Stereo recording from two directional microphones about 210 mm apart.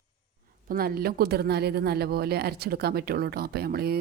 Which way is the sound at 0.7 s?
45° right (ahead or behind).